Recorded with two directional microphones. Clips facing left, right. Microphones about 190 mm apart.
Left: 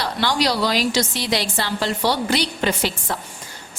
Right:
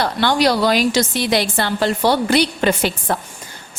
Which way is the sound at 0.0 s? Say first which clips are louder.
Right 5 dB; 55° right (ahead or behind).